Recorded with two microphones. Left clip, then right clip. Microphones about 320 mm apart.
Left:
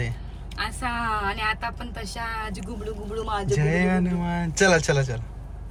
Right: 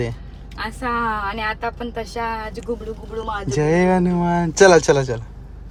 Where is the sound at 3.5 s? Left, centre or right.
Centre.